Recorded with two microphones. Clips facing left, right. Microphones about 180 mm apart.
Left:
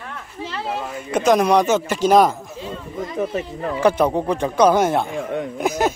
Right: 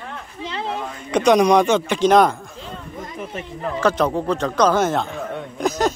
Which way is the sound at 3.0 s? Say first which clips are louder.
Left 9 dB; 80° left.